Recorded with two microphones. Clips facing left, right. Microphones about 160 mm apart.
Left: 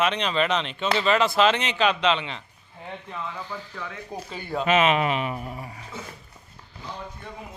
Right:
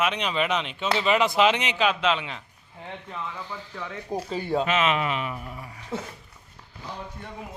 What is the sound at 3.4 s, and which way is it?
Speech, 20° right (ahead or behind).